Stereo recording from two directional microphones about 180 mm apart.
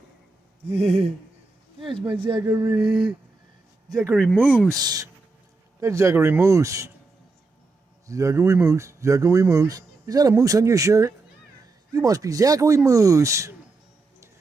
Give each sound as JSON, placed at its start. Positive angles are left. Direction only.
{"t": 0.7, "sound": "a sound", "side_deg": -35}
{"t": 1.8, "sound": "speech", "side_deg": -30}
{"t": 2.7, "sound": "speech", "side_deg": 0}
{"t": 3.8, "sound": "speech", "side_deg": -20}
{"t": 4.1, "sound": "speech", "side_deg": 0}
{"t": 4.8, "sound": "speech", "side_deg": -20}
{"t": 8.0, "sound": "speech", "side_deg": -15}